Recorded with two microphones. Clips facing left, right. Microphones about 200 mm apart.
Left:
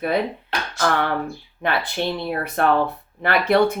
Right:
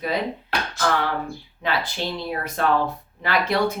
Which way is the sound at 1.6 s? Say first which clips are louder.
Left 3 dB; 55° left (ahead or behind).